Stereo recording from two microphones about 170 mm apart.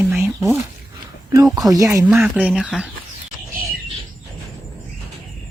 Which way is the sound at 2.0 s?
5° right (ahead or behind).